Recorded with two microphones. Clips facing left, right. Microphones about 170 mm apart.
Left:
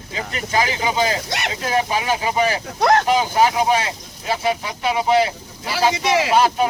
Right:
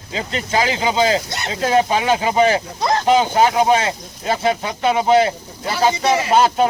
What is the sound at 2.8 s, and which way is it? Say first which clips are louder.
Speech: left 8 dB; 70° left (ahead or behind).